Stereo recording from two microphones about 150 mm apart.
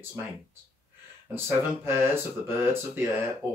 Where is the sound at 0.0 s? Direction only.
15° right (ahead or behind).